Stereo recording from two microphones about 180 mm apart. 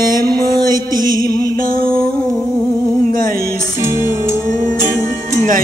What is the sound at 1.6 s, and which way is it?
Music, 55° right (ahead or behind).